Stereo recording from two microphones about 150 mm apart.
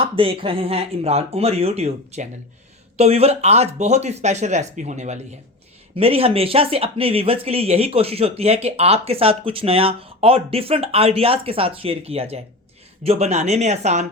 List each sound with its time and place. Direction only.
0.0 s speech: 35° right (ahead or behind)